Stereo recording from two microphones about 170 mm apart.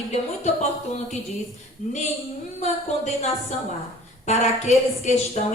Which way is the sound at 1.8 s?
45° left (ahead or behind).